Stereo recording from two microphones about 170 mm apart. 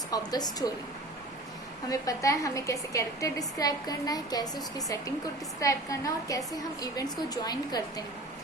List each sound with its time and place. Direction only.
0.1 s a woman's voice: 25° left (ahead or behind)
1.9 s a woman's voice: 20° left (ahead or behind)